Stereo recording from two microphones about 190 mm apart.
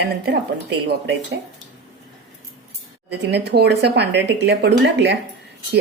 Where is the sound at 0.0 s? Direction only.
60° right (ahead or behind).